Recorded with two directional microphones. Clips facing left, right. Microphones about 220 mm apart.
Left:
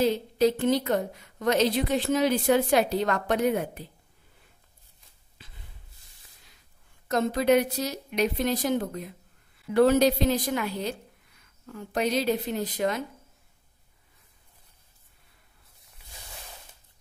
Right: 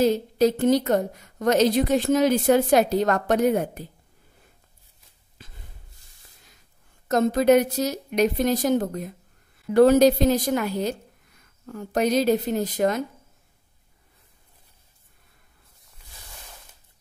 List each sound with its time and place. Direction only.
0.0 s a woman's voice: 45° right (ahead or behind)
5.4 s a sound: 45° right (ahead or behind)
7.1 s a woman's voice: 45° right (ahead or behind)